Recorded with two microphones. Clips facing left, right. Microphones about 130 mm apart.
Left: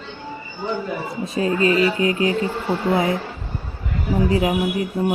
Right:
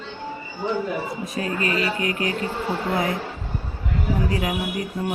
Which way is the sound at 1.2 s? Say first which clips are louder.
Left 10 dB; 25° left (ahead or behind).